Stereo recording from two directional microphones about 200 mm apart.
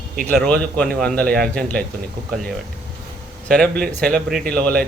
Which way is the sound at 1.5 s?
5° left (ahead or behind).